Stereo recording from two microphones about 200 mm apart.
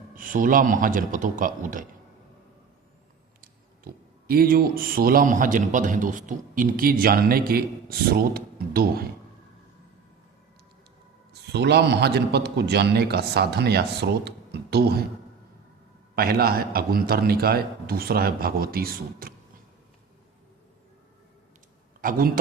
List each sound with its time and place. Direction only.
0.2 s speech: 45° right (ahead or behind)
3.4 s speech: 45° right (ahead or behind)
11.5 s a man's voice: 55° right (ahead or behind)
16.1 s speech: 50° right (ahead or behind)
22.0 s speech: 45° right (ahead or behind)